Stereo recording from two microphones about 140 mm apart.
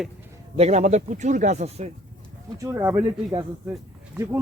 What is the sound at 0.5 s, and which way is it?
Speech, 50° right (ahead or behind).